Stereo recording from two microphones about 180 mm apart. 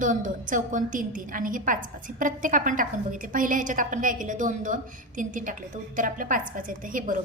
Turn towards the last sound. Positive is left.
turn(degrees=-50)  # may be behind; listen again after turning